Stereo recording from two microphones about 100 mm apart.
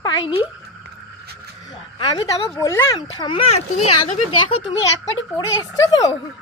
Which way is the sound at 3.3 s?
90° left.